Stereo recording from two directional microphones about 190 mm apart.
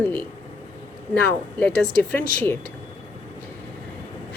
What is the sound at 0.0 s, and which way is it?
Speech, 5° left (ahead or behind).